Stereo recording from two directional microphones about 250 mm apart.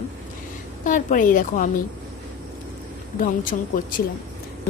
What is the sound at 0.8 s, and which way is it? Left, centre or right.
Speech, left.